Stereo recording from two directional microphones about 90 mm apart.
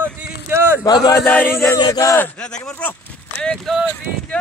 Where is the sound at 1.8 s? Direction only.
40° left (ahead or behind).